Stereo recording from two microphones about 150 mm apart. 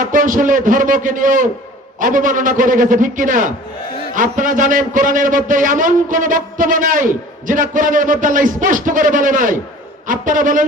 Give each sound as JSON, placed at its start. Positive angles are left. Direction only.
{"t": 0.0, "sound": "a man's voice", "side_deg": -60}